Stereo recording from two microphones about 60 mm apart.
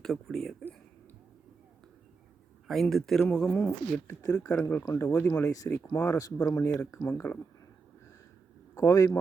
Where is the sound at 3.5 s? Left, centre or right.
Left.